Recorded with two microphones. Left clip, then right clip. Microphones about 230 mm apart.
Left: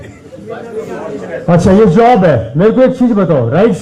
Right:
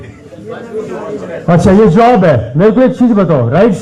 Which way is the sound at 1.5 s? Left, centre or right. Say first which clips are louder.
Right 1 dB; right.